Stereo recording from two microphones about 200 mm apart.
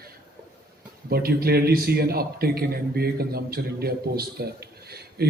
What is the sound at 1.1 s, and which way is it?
A man's voice, 50° right (ahead or behind).